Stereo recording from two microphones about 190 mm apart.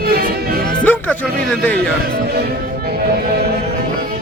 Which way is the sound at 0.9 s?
10° left (ahead or behind).